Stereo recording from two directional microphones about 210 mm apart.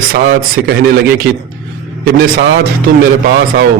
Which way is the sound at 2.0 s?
45° right (ahead or behind).